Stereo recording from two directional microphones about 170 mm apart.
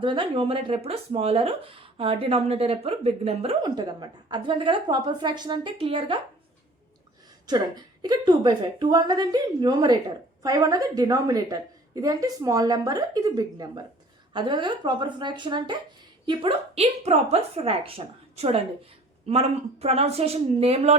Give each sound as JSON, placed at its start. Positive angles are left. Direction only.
{"t": 0.0, "sound": "speech", "side_deg": -30}
{"t": 3.6, "sound": "a woman's voice", "side_deg": -25}
{"t": 7.4, "sound": "a woman's voice", "side_deg": -25}